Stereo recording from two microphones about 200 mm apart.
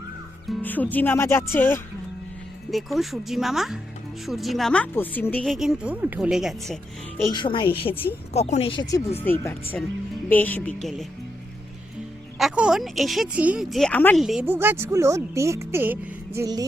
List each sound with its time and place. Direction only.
0.4 s speech: 10° left (ahead or behind)
2.6 s a woman's voice: centre (ahead or behind)
7.3 s speech: 20° left (ahead or behind); by 10.9 s 5° left (ahead or behind)
12.4 s speech: 5° right (ahead or behind)